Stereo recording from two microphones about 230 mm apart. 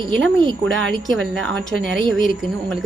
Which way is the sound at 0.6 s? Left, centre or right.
Right.